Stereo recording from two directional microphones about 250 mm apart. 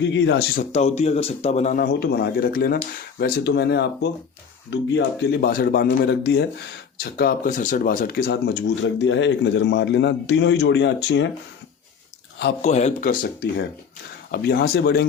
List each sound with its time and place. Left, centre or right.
0.0 s speech: left
0.5 s a man's voice: left
12.6 s speech: left
14.3 s a man's voice: left